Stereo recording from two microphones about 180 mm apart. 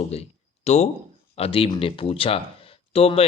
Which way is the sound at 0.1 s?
35° left (ahead or behind).